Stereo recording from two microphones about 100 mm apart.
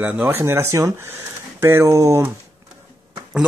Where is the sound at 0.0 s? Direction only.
20° right (ahead or behind).